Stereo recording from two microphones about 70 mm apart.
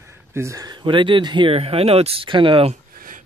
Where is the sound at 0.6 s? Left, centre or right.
Right.